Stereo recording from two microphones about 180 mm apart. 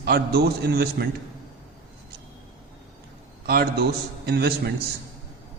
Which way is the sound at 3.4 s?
60° right (ahead or behind).